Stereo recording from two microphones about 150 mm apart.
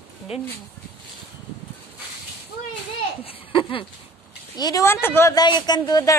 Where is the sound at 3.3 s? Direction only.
35° left (ahead or behind).